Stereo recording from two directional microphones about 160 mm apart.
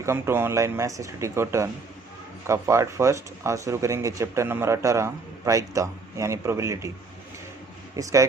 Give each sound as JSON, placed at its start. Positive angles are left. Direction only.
{"t": 0.0, "sound": "speech", "side_deg": -15}
{"t": 7.9, "sound": "speech", "side_deg": -20}